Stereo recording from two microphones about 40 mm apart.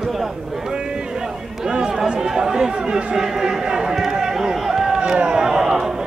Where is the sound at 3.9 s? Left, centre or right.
Centre.